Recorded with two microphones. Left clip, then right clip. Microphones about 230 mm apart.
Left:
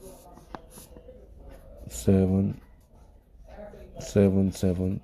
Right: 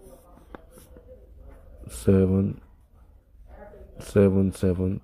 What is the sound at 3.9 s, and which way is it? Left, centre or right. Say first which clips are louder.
Speech: right 3 dB; centre.